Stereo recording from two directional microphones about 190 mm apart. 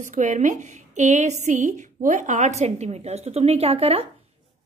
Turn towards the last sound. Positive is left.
turn(degrees=-30)  # may be behind; listen again after turning